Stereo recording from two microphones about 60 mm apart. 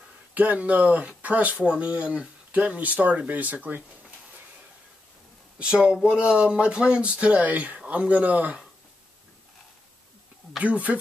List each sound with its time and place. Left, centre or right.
0.3 s speech: right
5.6 s speech: centre
10.6 s speech: right